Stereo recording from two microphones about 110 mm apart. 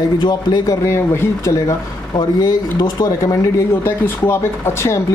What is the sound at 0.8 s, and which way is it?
Speech, 25° left (ahead or behind).